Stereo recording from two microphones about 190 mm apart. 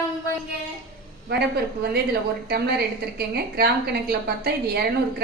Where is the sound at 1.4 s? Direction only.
55° right (ahead or behind).